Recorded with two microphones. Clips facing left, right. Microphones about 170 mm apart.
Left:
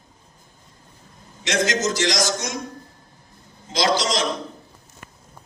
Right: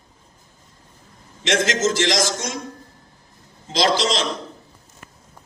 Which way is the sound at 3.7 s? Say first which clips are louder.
Right 2 dB; 30° right (ahead or behind).